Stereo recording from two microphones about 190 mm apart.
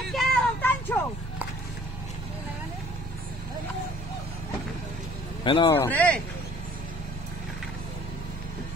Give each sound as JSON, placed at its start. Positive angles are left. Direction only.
{"t": 0.1, "sound": "vehicle", "side_deg": 5}
{"t": 5.4, "sound": "speech", "side_deg": 25}
{"t": 5.7, "sound": "speech", "side_deg": 10}